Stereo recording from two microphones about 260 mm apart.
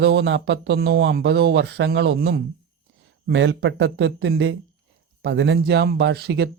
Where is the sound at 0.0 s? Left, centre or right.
Right.